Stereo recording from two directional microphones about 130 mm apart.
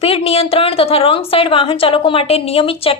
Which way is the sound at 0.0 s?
50° left (ahead or behind).